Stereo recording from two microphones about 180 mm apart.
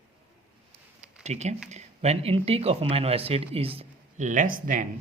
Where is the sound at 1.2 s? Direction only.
40° right (ahead or behind).